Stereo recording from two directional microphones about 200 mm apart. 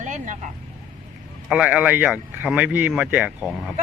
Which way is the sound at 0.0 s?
40° right (ahead or behind).